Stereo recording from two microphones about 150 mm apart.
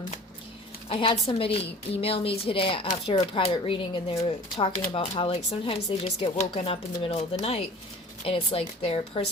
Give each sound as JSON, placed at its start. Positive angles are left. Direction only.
{"t": 0.9, "sound": "a woman's voice", "side_deg": 40}